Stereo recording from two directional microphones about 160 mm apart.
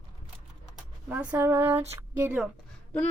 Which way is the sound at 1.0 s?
10° right (ahead or behind).